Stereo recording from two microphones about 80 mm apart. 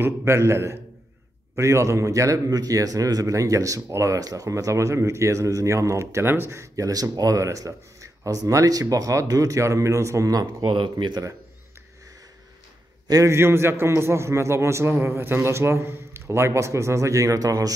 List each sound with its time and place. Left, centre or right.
0.0 s a man's voice: right
10.6 s speech: right
13.1 s a man's voice: right